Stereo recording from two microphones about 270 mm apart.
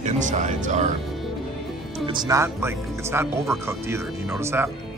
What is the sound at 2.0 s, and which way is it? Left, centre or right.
Speech, centre.